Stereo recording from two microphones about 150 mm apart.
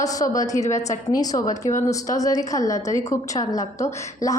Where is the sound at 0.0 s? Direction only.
25° left (ahead or behind).